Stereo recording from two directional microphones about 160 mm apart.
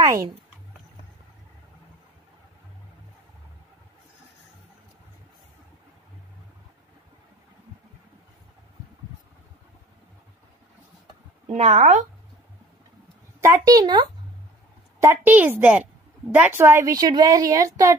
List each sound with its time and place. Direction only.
0.0 s speech: 20° right (ahead or behind)
11.4 s speech: 40° right (ahead or behind)
13.4 s a woman's voice: 20° right (ahead or behind)
15.0 s a woman's voice: 15° right (ahead or behind)